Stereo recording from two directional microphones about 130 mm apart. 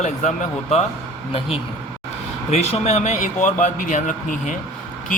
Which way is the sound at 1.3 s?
45° left (ahead or behind).